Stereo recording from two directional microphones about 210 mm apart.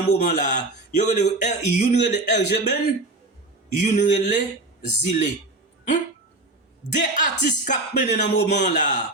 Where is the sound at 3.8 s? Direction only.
35° left (ahead or behind).